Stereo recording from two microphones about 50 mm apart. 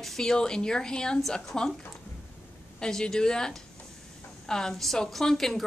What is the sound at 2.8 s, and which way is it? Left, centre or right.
A woman's voice, centre.